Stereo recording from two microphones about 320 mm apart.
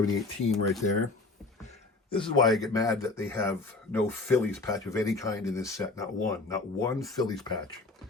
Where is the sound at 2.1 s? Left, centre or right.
Centre.